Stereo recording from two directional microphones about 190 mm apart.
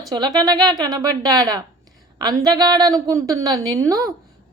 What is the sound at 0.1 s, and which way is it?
A woman's voice, 20° right (ahead or behind).